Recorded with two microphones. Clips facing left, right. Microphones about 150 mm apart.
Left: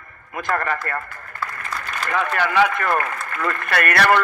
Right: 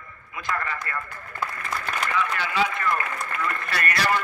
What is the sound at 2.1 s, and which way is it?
A man's voice, 55° left (ahead or behind).